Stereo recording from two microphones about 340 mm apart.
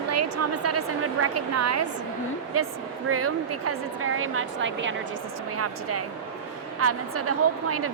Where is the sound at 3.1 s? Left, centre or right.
Right.